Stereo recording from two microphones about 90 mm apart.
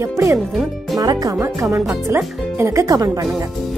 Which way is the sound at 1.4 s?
30° right (ahead or behind).